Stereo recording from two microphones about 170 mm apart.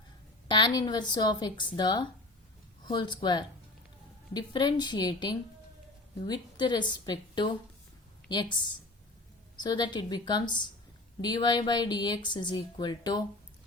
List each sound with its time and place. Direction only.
0.4 s a woman's voice: 25° left (ahead or behind)
9.6 s a woman's voice: 25° left (ahead or behind)